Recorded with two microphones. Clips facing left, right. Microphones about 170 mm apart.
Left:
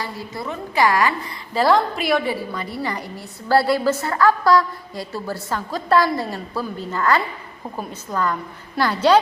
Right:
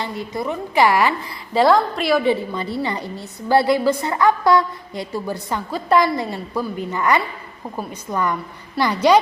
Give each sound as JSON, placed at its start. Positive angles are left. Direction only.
{"t": 0.0, "sound": "a woman's voice", "side_deg": -20}
{"t": 1.5, "sound": "a woman's voice", "side_deg": 0}
{"t": 2.2, "sound": "a woman's voice", "side_deg": -25}